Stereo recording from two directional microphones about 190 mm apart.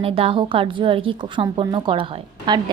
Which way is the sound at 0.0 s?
30° right (ahead or behind).